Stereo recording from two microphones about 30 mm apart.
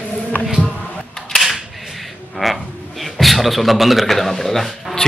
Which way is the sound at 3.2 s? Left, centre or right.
Centre.